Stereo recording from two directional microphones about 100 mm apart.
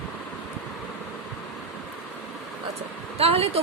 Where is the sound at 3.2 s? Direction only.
85° right.